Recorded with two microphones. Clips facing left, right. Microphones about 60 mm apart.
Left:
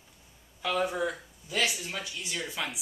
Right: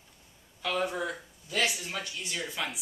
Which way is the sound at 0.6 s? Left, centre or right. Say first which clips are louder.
Left 2 dB; centre.